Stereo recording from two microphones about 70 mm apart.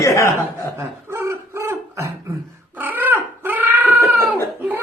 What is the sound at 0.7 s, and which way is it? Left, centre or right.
Gargling, right.